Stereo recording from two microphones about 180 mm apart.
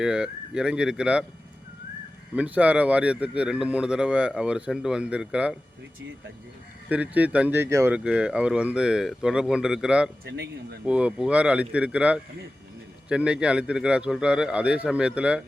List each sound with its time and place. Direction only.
0.0 s speech: 5° right (ahead or behind)
2.3 s speech: 10° right (ahead or behind)
6.9 s speech: 10° right (ahead or behind)
10.2 s speech: 75° right (ahead or behind)
10.8 s speech: 5° right (ahead or behind)